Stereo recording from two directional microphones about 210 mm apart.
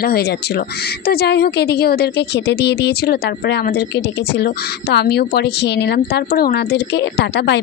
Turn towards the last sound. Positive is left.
turn(degrees=50)  # may be behind; listen again after turning